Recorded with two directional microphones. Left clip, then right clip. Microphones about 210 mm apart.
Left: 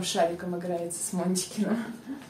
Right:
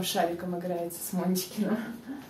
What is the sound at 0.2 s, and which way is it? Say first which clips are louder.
A woman's voice: left 4 dB; centre (ahead or behind).